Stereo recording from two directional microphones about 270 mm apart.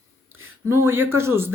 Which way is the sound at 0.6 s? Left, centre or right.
Centre.